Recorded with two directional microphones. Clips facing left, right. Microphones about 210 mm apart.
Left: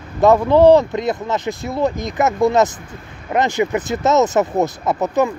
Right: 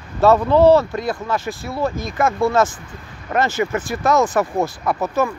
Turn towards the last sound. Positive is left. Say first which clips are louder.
# left 2 dB
turn(degrees=20)  # may be behind; listen again after turning